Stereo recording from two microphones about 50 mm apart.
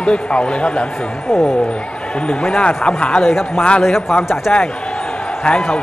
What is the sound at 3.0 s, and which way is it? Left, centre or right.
Speech, centre.